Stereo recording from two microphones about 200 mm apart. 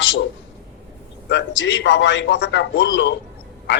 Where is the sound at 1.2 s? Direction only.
65° left (ahead or behind).